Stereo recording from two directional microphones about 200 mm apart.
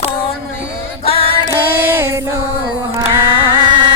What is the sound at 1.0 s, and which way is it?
Music, 30° left (ahead or behind).